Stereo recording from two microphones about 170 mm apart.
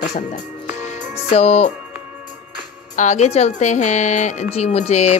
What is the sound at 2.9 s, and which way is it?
A woman's voice, 40° left (ahead or behind).